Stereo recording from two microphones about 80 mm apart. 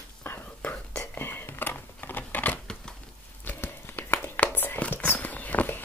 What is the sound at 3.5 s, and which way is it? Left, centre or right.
Whispering, left.